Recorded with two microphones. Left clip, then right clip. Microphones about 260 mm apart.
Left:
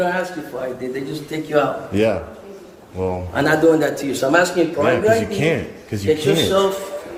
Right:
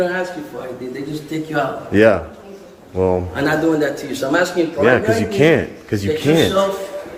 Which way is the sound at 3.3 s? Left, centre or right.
Left.